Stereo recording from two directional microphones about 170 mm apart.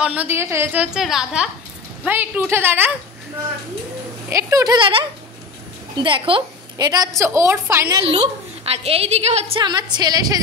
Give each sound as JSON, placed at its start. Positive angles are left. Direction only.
{"t": 0.0, "sound": "a woman's voice", "side_deg": -10}
{"t": 0.9, "sound": "a woman's voice", "side_deg": -5}
{"t": 4.3, "sound": "a woman's voice", "side_deg": -20}
{"t": 8.0, "sound": "a woman's voice", "side_deg": -35}
{"t": 9.6, "sound": "a woman's voice", "side_deg": -25}